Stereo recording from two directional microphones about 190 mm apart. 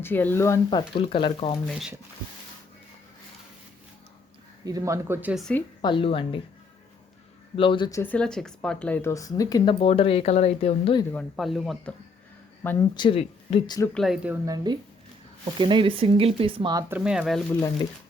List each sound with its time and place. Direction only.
0.0 s speech: 10° left (ahead or behind)
0.8 s speech: 25° left (ahead or behind)
1.6 s speech: 5° right (ahead or behind)
4.6 s speech: 15° right (ahead or behind)
5.3 s speech: 5° left (ahead or behind)
5.8 s speech: 25° left (ahead or behind)
7.5 s speech: 25° left (ahead or behind)
11.1 s speech: 5° left (ahead or behind)
13.0 s speech: 30° left (ahead or behind)
13.9 s speech: centre (ahead or behind)
14.4 s speech: 20° right (ahead or behind)
16.9 s speech: 5° right (ahead or behind)